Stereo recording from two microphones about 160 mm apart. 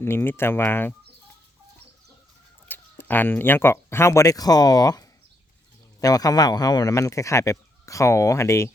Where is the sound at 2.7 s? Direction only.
10° left (ahead or behind).